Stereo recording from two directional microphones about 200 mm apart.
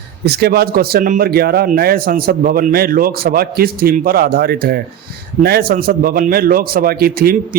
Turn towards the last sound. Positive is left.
turn(degrees=-50)  # may be behind; listen again after turning